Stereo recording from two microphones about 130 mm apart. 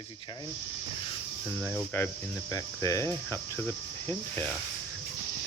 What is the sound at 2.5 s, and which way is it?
Cricket, 25° left (ahead or behind).